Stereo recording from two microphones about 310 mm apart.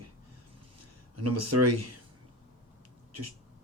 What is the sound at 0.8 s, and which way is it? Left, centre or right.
Speech, right.